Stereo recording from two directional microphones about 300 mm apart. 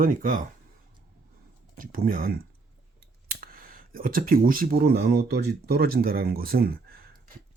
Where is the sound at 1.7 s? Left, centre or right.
Right.